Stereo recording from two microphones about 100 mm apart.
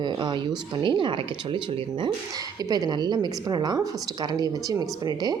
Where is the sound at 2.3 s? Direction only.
40° right (ahead or behind).